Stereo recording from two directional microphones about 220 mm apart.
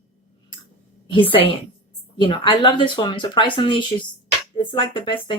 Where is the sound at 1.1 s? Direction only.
25° left (ahead or behind).